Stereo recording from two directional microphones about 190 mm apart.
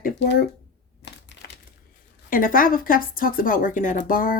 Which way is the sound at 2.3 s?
45° left (ahead or behind).